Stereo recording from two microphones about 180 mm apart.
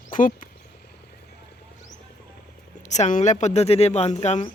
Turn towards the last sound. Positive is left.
turn(degrees=35)  # may be behind; listen again after turning